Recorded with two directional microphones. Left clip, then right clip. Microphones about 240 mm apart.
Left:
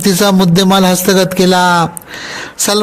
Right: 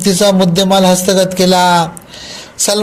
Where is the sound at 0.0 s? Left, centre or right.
Left.